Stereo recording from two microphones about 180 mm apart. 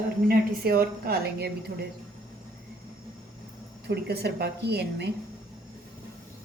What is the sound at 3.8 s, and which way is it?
A woman's voice, 65° right (ahead or behind).